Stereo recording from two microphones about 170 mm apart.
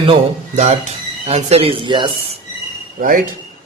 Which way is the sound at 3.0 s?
50° right (ahead or behind).